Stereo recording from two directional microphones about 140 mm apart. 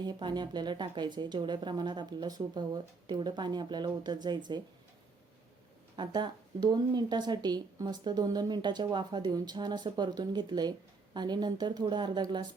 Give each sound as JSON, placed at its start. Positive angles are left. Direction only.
{"t": 0.0, "sound": "speech", "side_deg": -30}
{"t": 6.0, "sound": "speech", "side_deg": -30}